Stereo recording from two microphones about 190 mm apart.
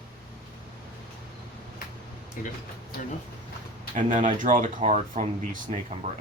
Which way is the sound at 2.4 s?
45° left (ahead or behind).